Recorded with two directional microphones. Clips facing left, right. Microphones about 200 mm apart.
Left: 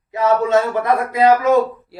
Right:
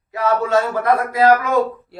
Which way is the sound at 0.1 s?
20° left (ahead or behind).